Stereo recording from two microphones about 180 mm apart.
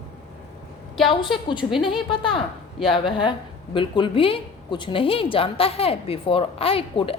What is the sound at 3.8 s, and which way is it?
A woman's voice, 30° left (ahead or behind).